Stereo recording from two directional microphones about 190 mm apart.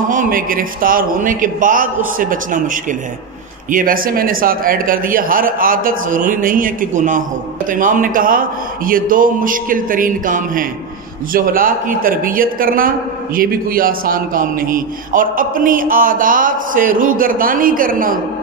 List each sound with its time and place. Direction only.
0.1 s a man's voice: 45° right (ahead or behind)